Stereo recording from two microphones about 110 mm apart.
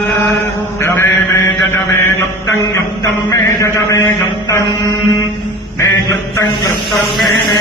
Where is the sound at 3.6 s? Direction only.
30° left (ahead or behind).